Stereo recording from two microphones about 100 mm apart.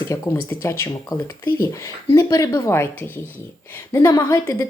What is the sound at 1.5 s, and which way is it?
A woman's voice, 35° left (ahead or behind).